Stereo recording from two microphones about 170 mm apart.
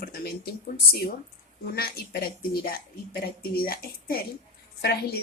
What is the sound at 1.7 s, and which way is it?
A woman's voice, 65° left (ahead or behind).